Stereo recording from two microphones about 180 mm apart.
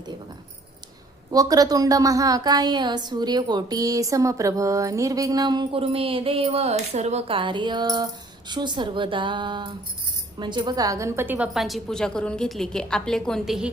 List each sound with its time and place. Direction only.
1.3 s a woman's voice: 20° right (ahead or behind); by 13.7 s centre (ahead or behind)